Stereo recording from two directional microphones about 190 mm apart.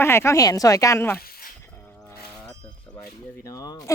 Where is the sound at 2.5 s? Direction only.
15° left (ahead or behind).